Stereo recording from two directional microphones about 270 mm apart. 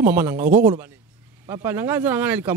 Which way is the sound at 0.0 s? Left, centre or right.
Centre.